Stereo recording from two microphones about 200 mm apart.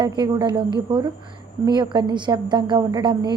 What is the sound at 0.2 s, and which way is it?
A woman's voice, 20° right (ahead or behind).